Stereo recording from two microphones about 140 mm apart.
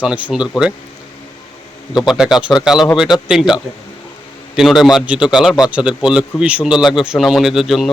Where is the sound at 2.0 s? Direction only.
5° right (ahead or behind).